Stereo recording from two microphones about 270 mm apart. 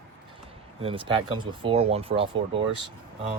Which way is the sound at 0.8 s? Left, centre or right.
Centre.